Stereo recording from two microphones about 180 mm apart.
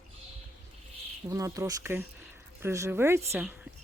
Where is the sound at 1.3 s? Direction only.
15° right (ahead or behind).